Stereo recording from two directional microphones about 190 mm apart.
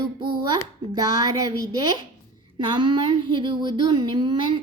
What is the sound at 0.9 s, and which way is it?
A woman's voice, 20° right (ahead or behind).